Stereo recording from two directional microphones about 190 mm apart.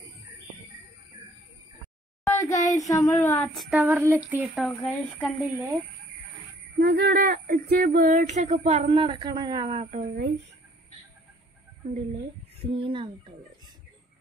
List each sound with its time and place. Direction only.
2.2 s a sound: 15° left (ahead or behind)
2.9 s speech: 15° left (ahead or behind)
3.5 s speech: 5° right (ahead or behind)
4.6 s speech: 5° left (ahead or behind)
6.8 s a sound: 60° right (ahead or behind)
12.6 s speech: 25° right (ahead or behind)